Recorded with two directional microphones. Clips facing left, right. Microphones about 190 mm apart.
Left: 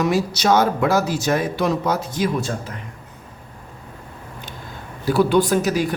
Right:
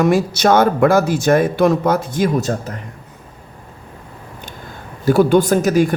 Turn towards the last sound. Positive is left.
turn(degrees=-50)  # may be behind; listen again after turning